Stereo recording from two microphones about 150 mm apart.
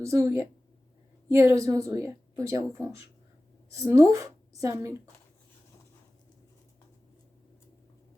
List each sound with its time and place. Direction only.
0.0 s a woman's voice: 20° right (ahead or behind)